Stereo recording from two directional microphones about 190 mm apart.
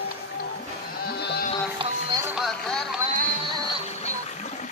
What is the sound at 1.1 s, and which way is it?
Sheep, 55° left (ahead or behind).